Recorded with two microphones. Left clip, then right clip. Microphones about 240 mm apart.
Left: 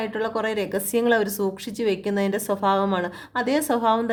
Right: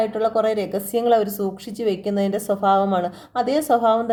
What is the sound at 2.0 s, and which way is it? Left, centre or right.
Speech, left.